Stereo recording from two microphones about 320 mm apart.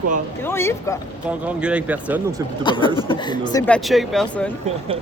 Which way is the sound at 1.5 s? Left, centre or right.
Centre.